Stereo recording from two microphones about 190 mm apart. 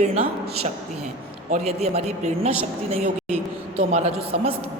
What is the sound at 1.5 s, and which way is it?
A woman's voice, 35° right (ahead or behind).